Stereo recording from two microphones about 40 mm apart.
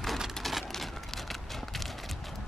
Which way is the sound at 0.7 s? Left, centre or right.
Centre.